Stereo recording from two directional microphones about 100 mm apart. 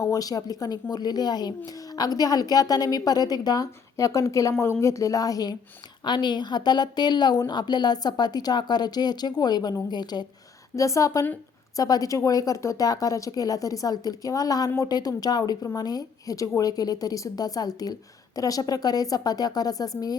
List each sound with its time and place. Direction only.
0.0 s a woman's voice: 35° left (ahead or behind)
10.8 s a woman's voice: 30° left (ahead or behind)